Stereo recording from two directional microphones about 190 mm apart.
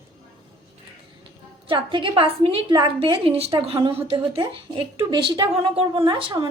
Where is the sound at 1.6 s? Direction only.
25° right (ahead or behind).